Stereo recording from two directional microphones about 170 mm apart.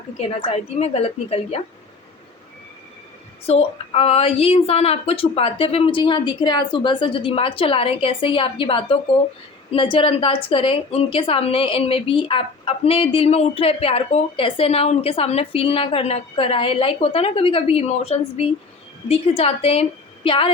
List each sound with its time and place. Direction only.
0.2 s a woman's voice: 35° left (ahead or behind)
3.4 s a woman's voice: 35° left (ahead or behind)